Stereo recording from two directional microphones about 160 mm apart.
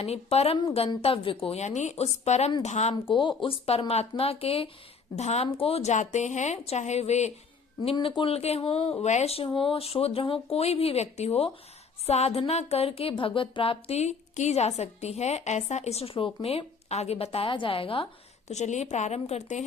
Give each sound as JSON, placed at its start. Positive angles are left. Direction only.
{"t": 0.0, "sound": "a woman's voice", "side_deg": 40}
{"t": 2.9, "sound": "a woman's voice", "side_deg": 30}
{"t": 7.9, "sound": "speech", "side_deg": 30}